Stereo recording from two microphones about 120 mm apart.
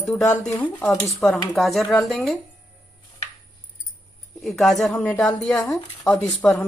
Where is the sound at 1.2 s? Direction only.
Centre (ahead or behind).